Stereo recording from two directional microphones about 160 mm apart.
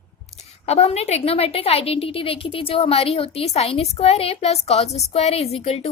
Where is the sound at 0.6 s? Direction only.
40° left (ahead or behind).